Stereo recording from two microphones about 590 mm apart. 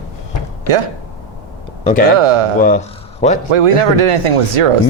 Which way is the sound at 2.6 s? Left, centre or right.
Centre.